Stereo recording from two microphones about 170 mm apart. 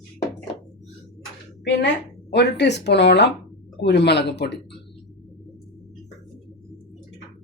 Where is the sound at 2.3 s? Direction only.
85° left.